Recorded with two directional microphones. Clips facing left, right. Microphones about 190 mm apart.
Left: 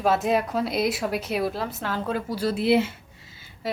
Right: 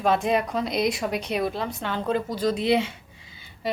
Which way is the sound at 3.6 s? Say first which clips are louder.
Right 2 dB; 5° left (ahead or behind).